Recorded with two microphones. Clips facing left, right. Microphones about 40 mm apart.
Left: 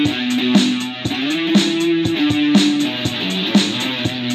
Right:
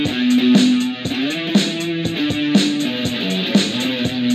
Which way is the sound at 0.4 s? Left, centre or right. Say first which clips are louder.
Right 2 dB; left.